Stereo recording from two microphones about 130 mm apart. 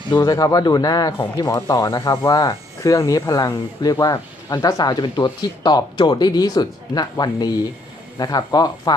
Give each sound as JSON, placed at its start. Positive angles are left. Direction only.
{"t": 0.1, "sound": "speech", "side_deg": 25}